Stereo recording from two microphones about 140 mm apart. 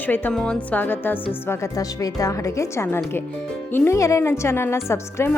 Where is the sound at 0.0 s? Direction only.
15° left (ahead or behind).